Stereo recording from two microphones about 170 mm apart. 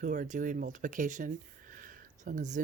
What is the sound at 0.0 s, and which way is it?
Speech, 50° right (ahead or behind).